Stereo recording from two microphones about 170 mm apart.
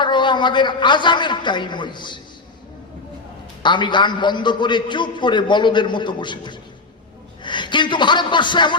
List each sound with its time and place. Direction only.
0.0 s a man's voice: 25° left (ahead or behind)
3.6 s a man's voice: 25° left (ahead or behind)